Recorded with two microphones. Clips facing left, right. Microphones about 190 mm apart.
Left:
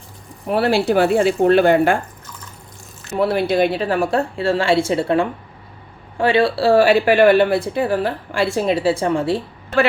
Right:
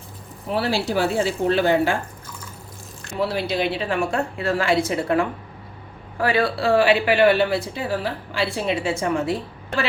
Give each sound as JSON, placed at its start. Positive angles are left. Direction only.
{"t": 0.4, "sound": "speech", "side_deg": 60}
{"t": 3.2, "sound": "speech", "side_deg": 55}